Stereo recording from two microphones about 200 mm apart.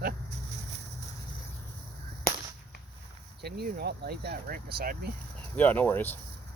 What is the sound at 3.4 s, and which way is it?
Speech, 55° right (ahead or behind).